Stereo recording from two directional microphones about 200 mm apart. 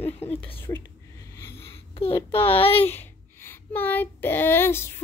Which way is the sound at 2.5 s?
30° left (ahead or behind).